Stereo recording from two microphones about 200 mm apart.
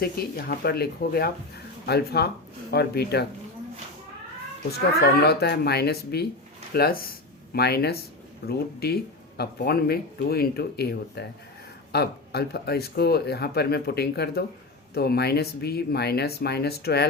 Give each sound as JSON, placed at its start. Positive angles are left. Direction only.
{"t": 0.0, "sound": "speech", "side_deg": 50}
{"t": 5.2, "sound": "speech", "side_deg": 55}